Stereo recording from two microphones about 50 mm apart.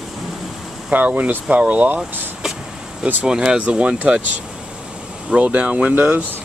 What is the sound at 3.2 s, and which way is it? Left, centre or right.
Speech, centre.